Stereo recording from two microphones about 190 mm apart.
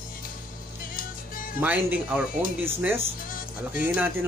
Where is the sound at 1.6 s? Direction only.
10° right (ahead or behind).